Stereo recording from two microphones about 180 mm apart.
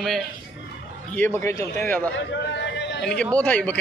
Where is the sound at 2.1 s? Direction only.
75° left (ahead or behind).